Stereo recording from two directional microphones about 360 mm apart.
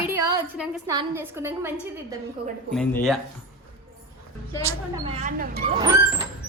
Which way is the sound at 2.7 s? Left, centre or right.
Centre.